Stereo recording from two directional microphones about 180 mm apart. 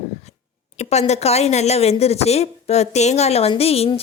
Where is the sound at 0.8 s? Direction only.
40° left (ahead or behind).